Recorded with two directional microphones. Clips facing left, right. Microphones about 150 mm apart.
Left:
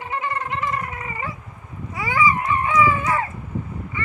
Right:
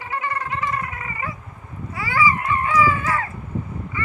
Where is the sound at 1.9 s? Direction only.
20° left (ahead or behind).